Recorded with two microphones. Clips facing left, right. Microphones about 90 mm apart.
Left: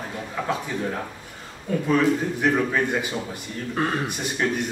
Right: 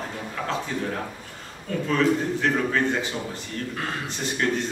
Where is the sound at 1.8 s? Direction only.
15° left (ahead or behind).